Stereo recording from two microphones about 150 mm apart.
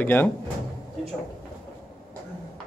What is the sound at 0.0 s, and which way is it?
Speech, 15° left (ahead or behind).